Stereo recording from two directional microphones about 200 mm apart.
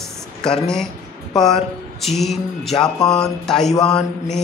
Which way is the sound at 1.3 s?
Centre (ahead or behind).